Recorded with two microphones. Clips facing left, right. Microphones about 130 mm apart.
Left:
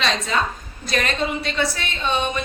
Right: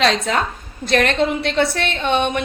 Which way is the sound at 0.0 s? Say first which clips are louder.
Right 6 dB; 90° right.